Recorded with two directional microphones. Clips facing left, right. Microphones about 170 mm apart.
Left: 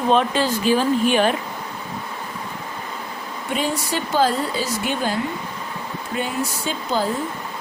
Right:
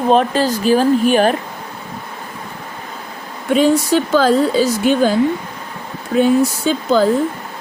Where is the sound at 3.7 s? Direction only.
90° right.